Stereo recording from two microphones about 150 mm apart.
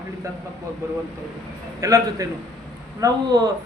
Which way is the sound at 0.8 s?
20° right (ahead or behind).